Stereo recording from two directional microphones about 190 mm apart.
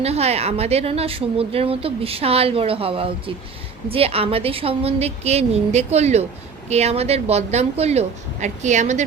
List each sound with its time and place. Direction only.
0.0 s a woman's voice: 35° right (ahead or behind)